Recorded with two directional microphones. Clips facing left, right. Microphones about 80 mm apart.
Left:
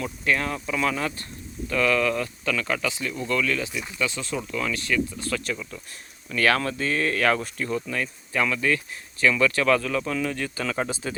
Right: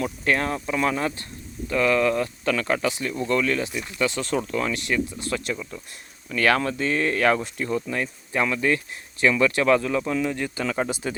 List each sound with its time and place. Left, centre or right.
0.0 s speech: right
4.7 s speech: right